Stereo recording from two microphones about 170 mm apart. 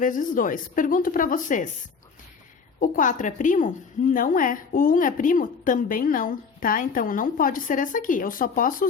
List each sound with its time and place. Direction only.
0.0 s a woman's voice: 50° left (ahead or behind)
2.8 s a woman's voice: 50° left (ahead or behind)